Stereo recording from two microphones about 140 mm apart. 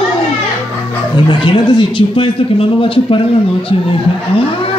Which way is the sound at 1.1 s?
35° left (ahead or behind).